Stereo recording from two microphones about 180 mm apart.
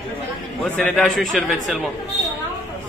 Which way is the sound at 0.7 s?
5° left (ahead or behind).